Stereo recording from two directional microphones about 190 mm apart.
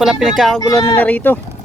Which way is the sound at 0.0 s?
5° right (ahead or behind).